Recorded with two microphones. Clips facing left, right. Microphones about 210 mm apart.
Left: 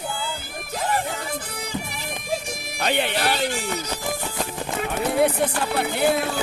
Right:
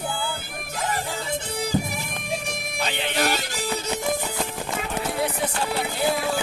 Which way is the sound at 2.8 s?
55° left (ahead or behind).